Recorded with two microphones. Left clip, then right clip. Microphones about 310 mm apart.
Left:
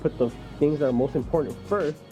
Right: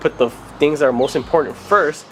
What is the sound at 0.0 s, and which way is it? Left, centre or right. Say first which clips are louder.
Speech: right 8 dB; centre.